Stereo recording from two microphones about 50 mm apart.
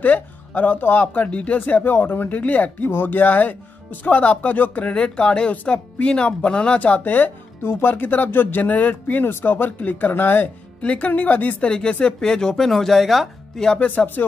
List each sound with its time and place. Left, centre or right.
0.6 s speech: left
7.1 s speech: left
10.8 s speech: left
11.7 s speech: centre
13.7 s speech: left